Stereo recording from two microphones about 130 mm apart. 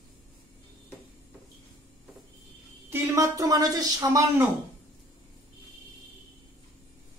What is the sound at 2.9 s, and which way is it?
A woman's voice, 20° right (ahead or behind).